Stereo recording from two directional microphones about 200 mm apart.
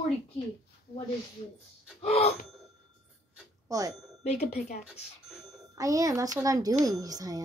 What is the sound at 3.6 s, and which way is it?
Speech, 15° right (ahead or behind).